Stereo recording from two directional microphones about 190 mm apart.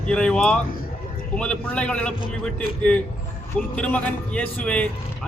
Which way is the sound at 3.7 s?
5° left (ahead or behind).